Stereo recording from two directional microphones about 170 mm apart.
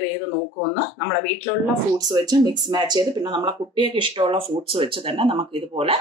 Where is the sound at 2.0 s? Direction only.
20° right (ahead or behind).